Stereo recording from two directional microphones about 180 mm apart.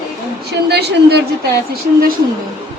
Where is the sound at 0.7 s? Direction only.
70° right (ahead or behind).